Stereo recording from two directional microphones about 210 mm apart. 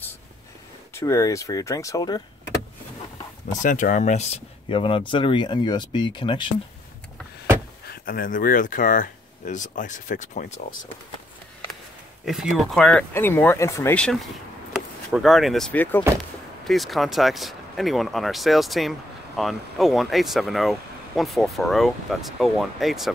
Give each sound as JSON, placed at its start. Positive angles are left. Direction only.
{"t": 0.9, "sound": "speech", "side_deg": 15}
{"t": 3.6, "sound": "speech", "side_deg": 35}
{"t": 7.9, "sound": "speech", "side_deg": 45}
{"t": 12.3, "sound": "speech", "side_deg": 0}